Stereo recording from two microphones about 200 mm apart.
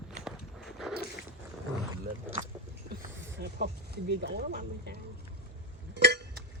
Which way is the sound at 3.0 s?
55° right (ahead or behind).